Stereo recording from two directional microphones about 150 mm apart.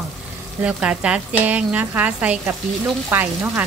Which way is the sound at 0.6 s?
10° right (ahead or behind).